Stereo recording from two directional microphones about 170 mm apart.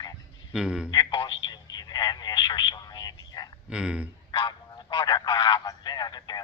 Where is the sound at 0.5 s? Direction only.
5° right (ahead or behind).